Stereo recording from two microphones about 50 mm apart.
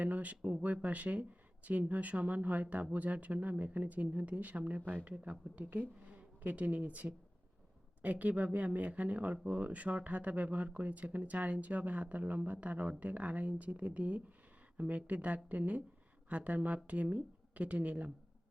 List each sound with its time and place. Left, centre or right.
0.0 s speech: right